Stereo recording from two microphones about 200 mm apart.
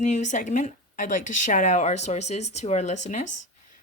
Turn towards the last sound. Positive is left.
turn(degrees=35)  # may be behind; listen again after turning